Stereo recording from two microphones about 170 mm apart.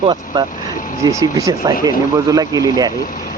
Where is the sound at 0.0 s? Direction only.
25° right (ahead or behind).